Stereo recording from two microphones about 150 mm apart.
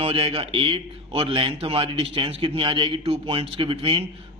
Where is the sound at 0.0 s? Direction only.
40° right (ahead or behind).